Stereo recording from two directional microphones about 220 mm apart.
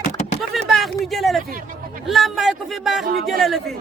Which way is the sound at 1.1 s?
Centre (ahead or behind).